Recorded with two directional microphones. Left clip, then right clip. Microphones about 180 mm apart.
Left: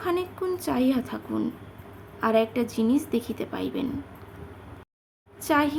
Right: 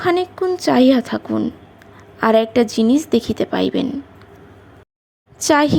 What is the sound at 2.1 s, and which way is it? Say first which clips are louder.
Speech: right 9 dB; 35° right (ahead or behind).